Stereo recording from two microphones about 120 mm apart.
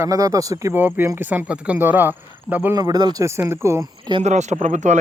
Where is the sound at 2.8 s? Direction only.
35° right (ahead or behind).